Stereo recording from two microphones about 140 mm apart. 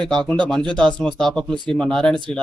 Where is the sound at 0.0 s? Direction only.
5° left (ahead or behind).